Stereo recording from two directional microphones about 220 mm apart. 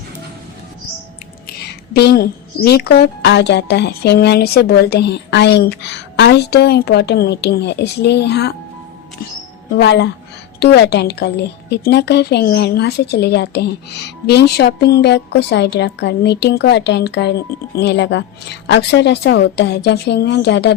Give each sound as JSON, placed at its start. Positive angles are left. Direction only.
{"t": 1.9, "sound": "a woman's voice", "side_deg": 45}
{"t": 9.7, "sound": "a woman's voice", "side_deg": 50}